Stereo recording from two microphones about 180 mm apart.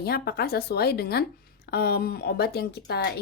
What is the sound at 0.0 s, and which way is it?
A woman's voice, 60° left (ahead or behind).